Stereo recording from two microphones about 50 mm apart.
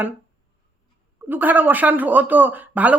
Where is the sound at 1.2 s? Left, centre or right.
Right.